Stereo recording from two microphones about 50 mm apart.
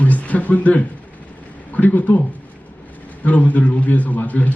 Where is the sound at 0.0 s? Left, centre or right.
Left.